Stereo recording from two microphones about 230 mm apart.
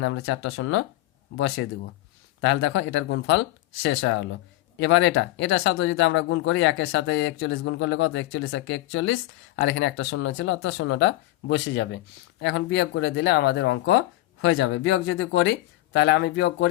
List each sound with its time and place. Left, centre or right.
0.0 s speech: left